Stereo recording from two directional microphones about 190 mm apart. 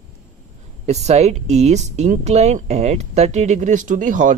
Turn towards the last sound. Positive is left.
turn(degrees=-40)  # may be behind; listen again after turning